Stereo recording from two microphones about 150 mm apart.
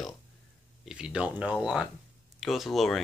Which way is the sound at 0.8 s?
5° right (ahead or behind).